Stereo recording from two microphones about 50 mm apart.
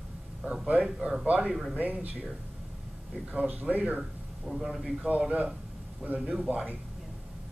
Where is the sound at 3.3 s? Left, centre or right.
Right.